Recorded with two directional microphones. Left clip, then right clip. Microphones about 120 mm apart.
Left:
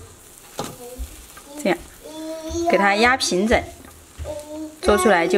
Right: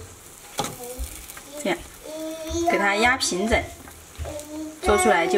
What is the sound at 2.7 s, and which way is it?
Speech, 45° left (ahead or behind).